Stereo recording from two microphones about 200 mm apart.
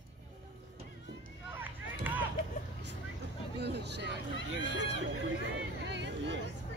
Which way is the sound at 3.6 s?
55° right (ahead or behind).